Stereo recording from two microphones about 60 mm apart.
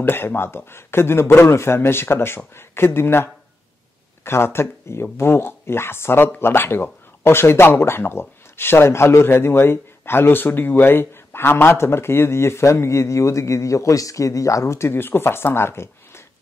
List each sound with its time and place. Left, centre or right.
0.0 s speech: left